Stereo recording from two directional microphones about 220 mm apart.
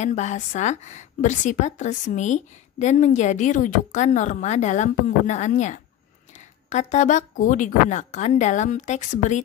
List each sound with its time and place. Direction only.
0.0 s a woman's voice: 30° left (ahead or behind)